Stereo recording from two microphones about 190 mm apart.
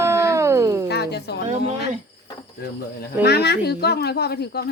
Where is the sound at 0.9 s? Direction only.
60° left (ahead or behind).